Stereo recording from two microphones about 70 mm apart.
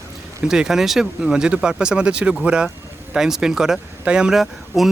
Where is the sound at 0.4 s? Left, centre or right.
Centre.